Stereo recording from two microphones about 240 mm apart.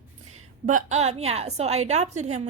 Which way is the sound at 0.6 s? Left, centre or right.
Right.